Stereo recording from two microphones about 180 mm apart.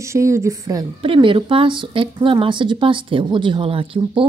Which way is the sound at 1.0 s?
30° right (ahead or behind).